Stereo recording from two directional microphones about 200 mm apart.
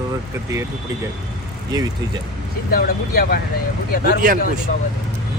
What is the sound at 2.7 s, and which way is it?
Speech, 50° left (ahead or behind).